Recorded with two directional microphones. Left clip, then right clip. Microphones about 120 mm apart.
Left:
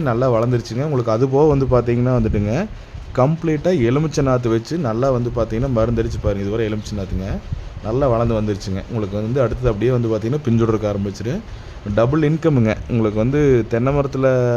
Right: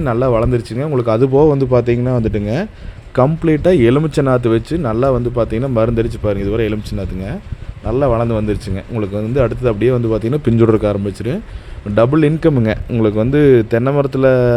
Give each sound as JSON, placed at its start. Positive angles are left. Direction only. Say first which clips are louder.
{"t": 0.0, "sound": "a man's voice", "louder": "right 3 dB", "side_deg": -15}
{"t": 1.3, "sound": "a man's voice", "louder": "right 2 dB", "side_deg": -5}
{"t": 3.4, "sound": "speech", "louder": "right 6 dB", "side_deg": -30}
{"t": 7.9, "sound": "speech", "louder": "right 3 dB", "side_deg": -20}